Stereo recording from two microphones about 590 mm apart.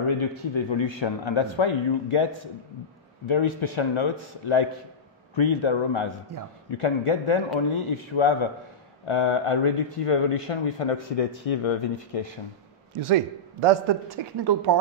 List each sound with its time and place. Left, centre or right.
0.0 s speech: left
3.3 s speech: left
12.9 s speech: right